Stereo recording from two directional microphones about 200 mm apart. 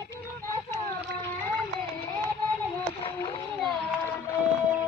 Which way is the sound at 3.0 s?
25° left (ahead or behind).